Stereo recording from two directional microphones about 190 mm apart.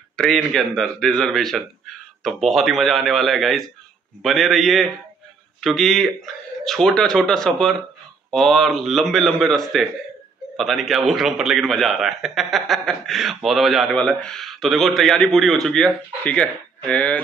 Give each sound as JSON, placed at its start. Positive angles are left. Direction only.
{"t": 0.1, "sound": "a man's voice", "side_deg": 0}